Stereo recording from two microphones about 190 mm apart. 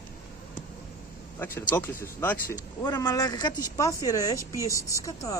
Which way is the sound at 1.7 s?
10° left (ahead or behind).